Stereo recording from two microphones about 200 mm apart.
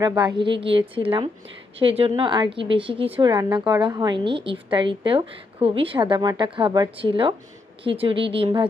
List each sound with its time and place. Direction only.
0.0 s a woman's voice: 20° right (ahead or behind)